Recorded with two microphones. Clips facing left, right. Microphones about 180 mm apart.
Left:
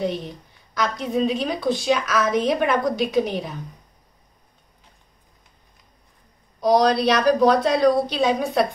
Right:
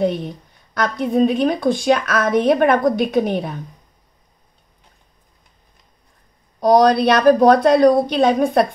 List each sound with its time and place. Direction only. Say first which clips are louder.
0.0 s a woman's voice: right 6 dB; 55° right (ahead or behind)
6.6 s a woman's voice: right 4 dB; 50° right (ahead or behind)